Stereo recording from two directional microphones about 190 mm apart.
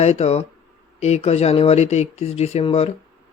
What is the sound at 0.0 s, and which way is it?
Speech, 35° left (ahead or behind).